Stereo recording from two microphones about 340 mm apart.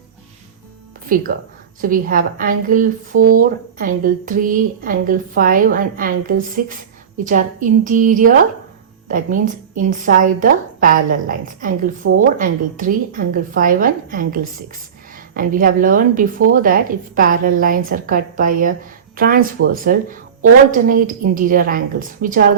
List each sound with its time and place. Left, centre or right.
1.0 s a woman's voice: right